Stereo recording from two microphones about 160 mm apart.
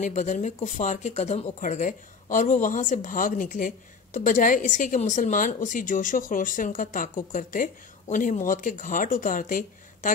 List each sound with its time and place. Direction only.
0.0 s speech: 50° left (ahead or behind)